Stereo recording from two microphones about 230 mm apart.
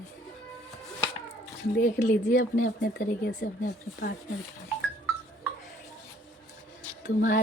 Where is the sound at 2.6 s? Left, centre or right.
Left.